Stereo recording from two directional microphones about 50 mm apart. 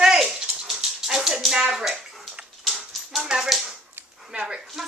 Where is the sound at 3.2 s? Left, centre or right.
Centre.